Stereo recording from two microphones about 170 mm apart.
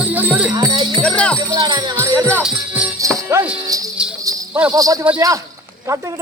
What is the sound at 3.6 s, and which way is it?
Music, 20° right (ahead or behind).